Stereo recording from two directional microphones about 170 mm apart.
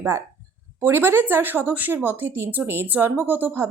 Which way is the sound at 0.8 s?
15° right (ahead or behind).